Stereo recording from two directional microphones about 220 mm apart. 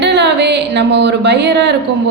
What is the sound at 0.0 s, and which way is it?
A woman's voice, 50° right (ahead or behind).